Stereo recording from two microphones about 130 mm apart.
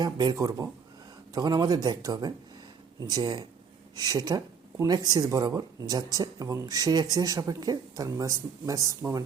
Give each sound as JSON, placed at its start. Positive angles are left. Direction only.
{"t": 0.0, "sound": "speech", "side_deg": -30}